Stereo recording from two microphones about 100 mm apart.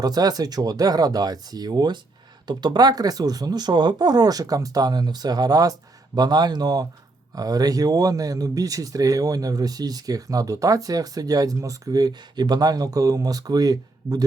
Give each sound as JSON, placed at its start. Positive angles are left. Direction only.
{"t": 0.0, "sound": "speech", "side_deg": -40}